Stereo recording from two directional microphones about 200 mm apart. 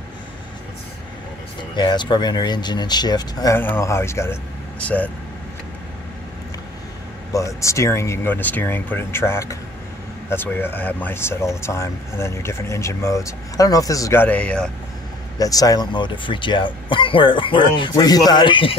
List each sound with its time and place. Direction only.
1.6 s speech: 20° left (ahead or behind); by 5.1 s 5° left (ahead or behind)
7.3 s speech: 15° left (ahead or behind)
15.3 s speech: 20° left (ahead or behind)